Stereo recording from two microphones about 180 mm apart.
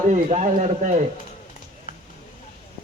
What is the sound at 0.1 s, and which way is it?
Speech, 40° right (ahead or behind).